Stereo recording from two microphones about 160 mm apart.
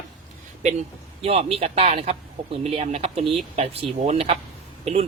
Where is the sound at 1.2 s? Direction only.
40° right (ahead or behind).